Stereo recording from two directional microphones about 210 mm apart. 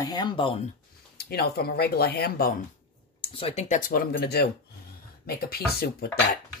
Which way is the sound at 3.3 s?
30° left (ahead or behind).